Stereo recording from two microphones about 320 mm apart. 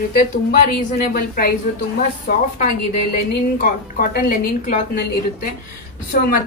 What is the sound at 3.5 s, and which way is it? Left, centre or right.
A woman's voice, left.